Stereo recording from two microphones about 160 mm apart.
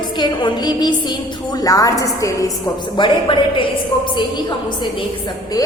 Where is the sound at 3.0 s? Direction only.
30° left (ahead or behind).